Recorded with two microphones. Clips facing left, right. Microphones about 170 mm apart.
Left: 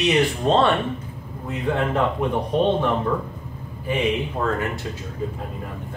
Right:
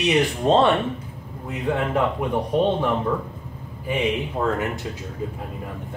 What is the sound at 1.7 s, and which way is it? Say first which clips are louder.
Speech: even; 10° right (ahead or behind).